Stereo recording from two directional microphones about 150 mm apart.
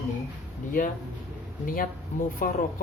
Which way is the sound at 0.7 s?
65° left (ahead or behind).